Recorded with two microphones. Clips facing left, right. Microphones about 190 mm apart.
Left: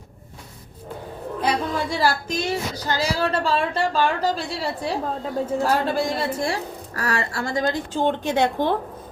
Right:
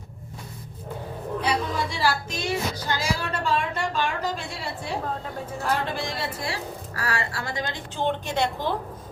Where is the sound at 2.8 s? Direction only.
35° left (ahead or behind).